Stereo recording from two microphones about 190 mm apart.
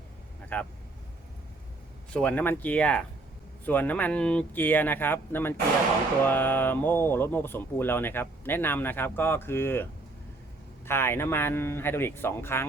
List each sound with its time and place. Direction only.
0.5 s speech: 10° left (ahead or behind)
2.1 s speech: 10° left (ahead or behind)
10.8 s speech: 10° left (ahead or behind)